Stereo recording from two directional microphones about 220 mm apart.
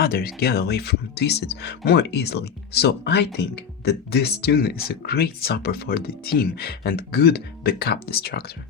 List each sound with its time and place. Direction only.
0.0 s speech: 45° left (ahead or behind)